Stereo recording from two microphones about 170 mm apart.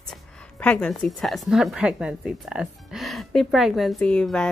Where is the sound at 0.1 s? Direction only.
5° left (ahead or behind).